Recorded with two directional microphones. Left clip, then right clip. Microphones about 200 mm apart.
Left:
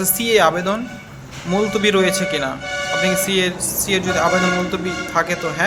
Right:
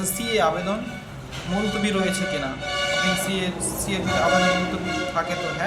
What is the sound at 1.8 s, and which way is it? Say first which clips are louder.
Speech: left 8 dB; 50° left (ahead or behind).